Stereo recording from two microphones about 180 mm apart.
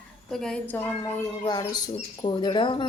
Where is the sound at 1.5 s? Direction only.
20° left (ahead or behind).